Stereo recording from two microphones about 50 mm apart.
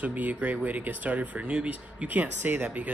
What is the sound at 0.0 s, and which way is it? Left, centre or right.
Speech, right.